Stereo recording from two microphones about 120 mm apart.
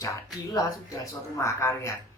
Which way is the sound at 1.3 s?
25° left (ahead or behind).